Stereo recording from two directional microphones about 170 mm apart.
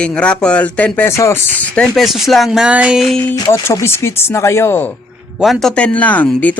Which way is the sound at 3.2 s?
15° left (ahead or behind).